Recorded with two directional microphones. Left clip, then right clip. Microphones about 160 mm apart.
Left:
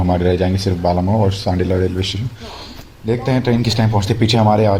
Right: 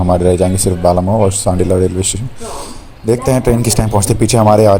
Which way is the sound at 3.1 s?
65° right (ahead or behind).